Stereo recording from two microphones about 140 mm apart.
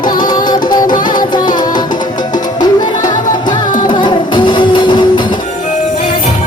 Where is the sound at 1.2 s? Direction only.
30° left (ahead or behind).